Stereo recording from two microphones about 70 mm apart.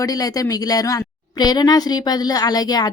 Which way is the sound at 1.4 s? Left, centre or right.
Left.